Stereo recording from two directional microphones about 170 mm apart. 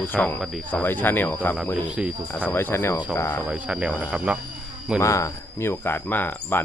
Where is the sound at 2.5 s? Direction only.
10° left (ahead or behind).